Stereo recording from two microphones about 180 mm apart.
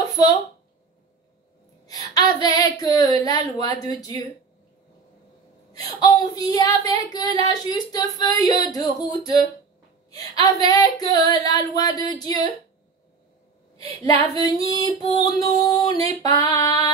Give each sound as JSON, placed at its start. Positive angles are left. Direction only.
{"t": 1.9, "sound": "female singing", "side_deg": 20}
{"t": 5.7, "sound": "female singing", "side_deg": 20}
{"t": 14.0, "sound": "female singing", "side_deg": 20}